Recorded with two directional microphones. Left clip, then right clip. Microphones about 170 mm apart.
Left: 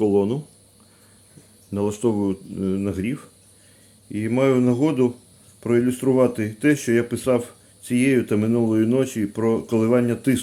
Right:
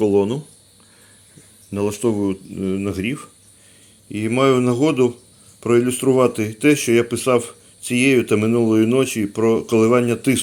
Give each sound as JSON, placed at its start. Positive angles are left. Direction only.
{"t": 0.0, "sound": "speech", "side_deg": 5}
{"t": 1.7, "sound": "speech", "side_deg": 15}